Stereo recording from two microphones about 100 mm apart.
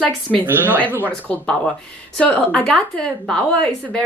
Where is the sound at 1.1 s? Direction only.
15° left (ahead or behind).